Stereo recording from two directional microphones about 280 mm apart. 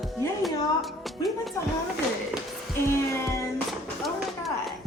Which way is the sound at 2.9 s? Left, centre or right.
Centre.